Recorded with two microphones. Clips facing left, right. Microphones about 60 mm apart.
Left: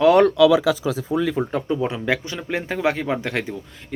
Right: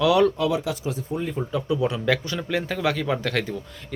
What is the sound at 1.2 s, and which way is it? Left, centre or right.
Speech, left.